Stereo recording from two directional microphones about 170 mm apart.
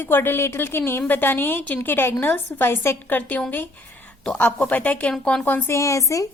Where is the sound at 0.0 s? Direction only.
10° left (ahead or behind).